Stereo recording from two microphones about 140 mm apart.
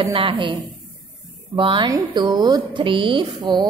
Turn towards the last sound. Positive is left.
turn(degrees=-35)  # may be behind; listen again after turning